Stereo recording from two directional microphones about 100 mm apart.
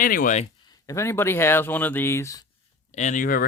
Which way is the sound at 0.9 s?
25° left (ahead or behind).